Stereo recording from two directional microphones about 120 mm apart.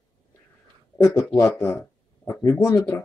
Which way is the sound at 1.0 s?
25° left (ahead or behind).